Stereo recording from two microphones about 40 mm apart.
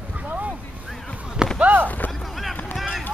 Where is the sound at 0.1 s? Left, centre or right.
Right.